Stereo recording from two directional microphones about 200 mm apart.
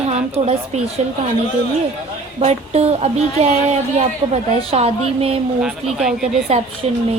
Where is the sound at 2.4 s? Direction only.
30° right (ahead or behind).